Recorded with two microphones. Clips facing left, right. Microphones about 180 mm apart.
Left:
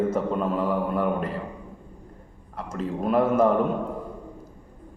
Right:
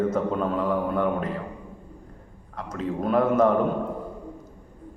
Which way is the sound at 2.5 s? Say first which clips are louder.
Right 1 dB; 5° left (ahead or behind).